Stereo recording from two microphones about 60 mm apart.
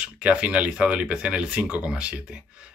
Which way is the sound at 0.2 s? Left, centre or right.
Centre.